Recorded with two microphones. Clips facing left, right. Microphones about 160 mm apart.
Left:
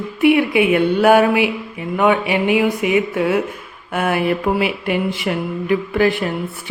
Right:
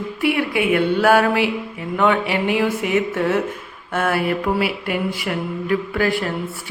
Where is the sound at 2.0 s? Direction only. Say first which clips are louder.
Left 2 dB; 15° left (ahead or behind).